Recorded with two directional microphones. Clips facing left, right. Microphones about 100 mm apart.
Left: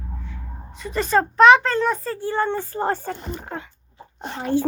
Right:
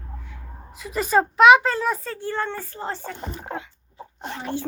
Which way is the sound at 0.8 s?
5° right (ahead or behind).